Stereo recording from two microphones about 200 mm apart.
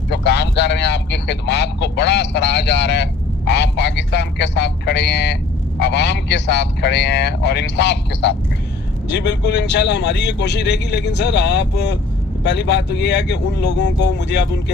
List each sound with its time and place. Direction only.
0.1 s speech: 60° left (ahead or behind)